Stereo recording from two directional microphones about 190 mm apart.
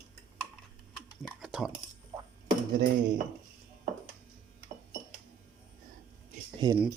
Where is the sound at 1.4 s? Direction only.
5° right (ahead or behind).